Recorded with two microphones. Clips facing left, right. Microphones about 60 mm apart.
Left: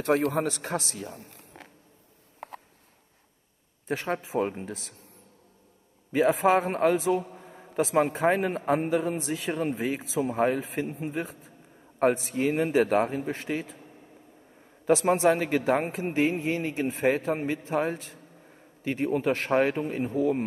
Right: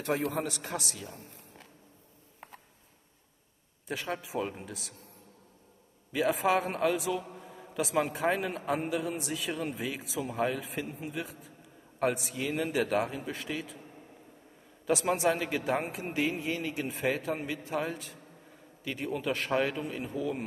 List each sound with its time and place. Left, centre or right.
0.1 s a man's voice: left
2.4 s a sound: left
3.8 s a man's voice: left
6.4 s a man's voice: left
14.9 s a man's voice: left